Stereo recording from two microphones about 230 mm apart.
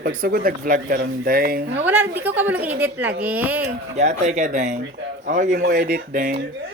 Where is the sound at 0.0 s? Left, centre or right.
Right.